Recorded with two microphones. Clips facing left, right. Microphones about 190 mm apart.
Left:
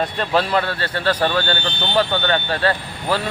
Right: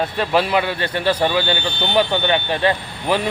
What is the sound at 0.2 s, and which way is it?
Speech, 10° right (ahead or behind).